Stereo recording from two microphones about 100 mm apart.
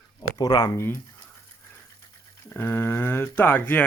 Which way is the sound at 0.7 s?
25° left (ahead or behind).